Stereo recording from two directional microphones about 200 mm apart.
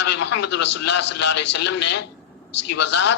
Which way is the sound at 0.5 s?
60° left (ahead or behind).